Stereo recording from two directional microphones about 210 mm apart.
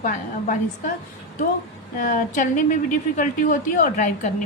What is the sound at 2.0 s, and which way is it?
A woman's voice, 40° left (ahead or behind).